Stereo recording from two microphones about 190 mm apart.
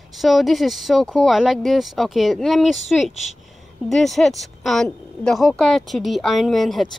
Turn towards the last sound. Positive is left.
turn(degrees=0)  # may be behind; listen again after turning